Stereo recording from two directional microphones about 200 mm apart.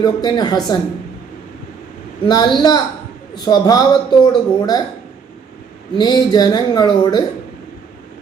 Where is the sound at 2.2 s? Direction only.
20° left (ahead or behind).